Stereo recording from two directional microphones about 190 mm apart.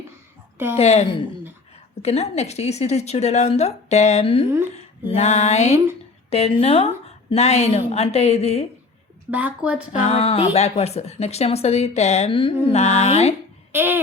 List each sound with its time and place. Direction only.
0.8 s a woman's voice: 35° left (ahead or behind)
4.7 s a sound: 35° left (ahead or behind)
6.3 s a woman's voice: 30° left (ahead or behind)
9.3 s speech: 5° right (ahead or behind)
9.9 s a woman's voice: 35° left (ahead or behind)
13.7 s speech: 10° right (ahead or behind)